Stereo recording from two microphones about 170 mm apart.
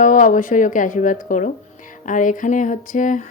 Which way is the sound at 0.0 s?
50° left (ahead or behind).